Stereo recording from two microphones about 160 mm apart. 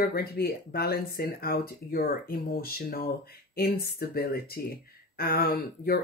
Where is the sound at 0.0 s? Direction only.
70° left (ahead or behind).